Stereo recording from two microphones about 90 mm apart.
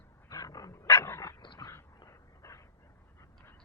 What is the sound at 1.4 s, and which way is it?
Dog, 60° left (ahead or behind).